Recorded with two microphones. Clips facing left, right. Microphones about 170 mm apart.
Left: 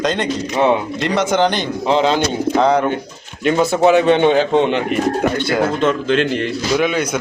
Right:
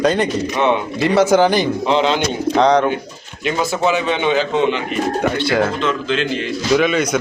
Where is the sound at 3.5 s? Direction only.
55° left (ahead or behind).